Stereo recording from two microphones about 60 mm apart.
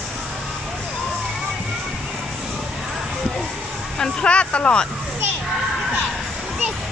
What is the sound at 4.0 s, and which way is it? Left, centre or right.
Speech, centre.